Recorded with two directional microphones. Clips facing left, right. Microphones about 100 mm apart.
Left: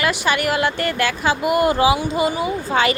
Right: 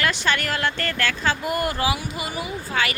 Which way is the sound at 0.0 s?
10° left (ahead or behind).